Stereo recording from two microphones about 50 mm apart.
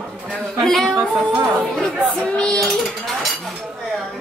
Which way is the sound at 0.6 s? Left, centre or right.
Centre.